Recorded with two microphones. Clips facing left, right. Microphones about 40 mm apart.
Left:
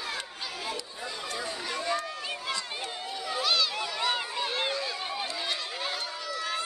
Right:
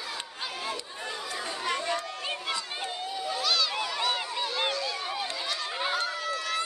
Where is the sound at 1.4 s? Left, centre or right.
Right.